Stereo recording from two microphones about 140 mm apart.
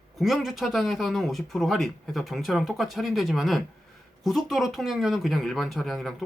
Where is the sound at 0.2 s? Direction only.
Centre (ahead or behind).